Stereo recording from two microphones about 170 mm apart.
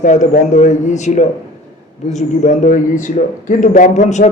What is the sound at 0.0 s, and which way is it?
A man's voice, 45° left (ahead or behind).